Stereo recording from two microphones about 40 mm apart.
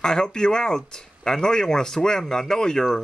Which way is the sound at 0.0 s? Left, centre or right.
Centre.